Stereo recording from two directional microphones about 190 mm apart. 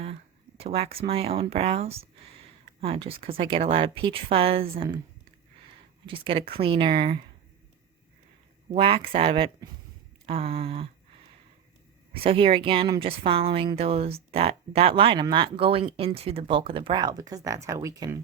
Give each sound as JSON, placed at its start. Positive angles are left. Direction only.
{"t": 0.0, "sound": "speech", "side_deg": -30}
{"t": 6.1, "sound": "speech", "side_deg": -30}
{"t": 8.7, "sound": "speech", "side_deg": -30}
{"t": 12.1, "sound": "speech", "side_deg": -30}